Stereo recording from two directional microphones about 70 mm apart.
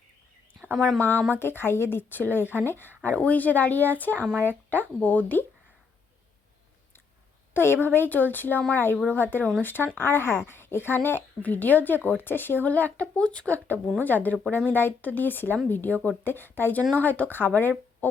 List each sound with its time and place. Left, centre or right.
0.9 s speech: left
7.5 s speech: left; by 13.6 s centre
14.0 s speech: left